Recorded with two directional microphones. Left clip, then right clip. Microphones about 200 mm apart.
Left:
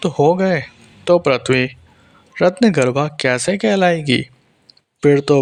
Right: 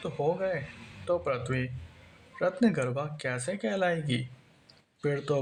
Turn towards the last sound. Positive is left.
turn(degrees=40)  # may be behind; listen again after turning